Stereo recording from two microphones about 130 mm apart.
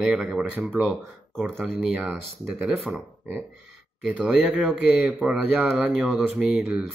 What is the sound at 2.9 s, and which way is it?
Speech, 15° right (ahead or behind).